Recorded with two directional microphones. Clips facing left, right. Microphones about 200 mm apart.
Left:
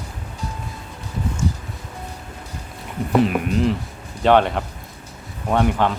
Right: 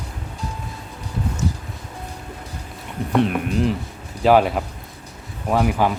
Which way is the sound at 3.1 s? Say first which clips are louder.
Left 1 dB; centre (ahead or behind).